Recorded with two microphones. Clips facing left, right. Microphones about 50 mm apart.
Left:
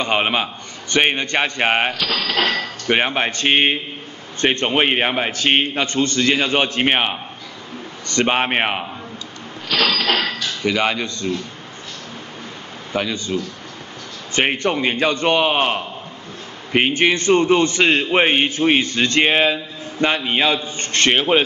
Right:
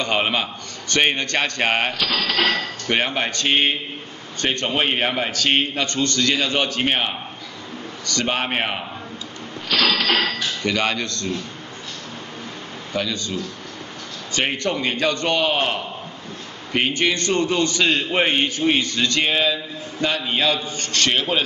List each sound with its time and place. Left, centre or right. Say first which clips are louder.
0.0 s a man's voice: left 2 dB; left
1.9 s speech: left 1 dB; centre
2.9 s a man's voice: left 3 dB; left
9.7 s speech: left 1 dB; centre
12.9 s a man's voice: left 3 dB; left